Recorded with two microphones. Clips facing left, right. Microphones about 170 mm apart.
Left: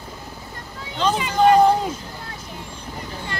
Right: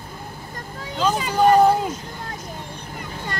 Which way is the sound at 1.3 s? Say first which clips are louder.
Even; 10° right (ahead or behind).